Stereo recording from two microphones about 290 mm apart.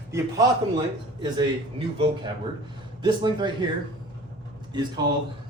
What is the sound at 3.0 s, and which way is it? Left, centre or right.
Speech, centre.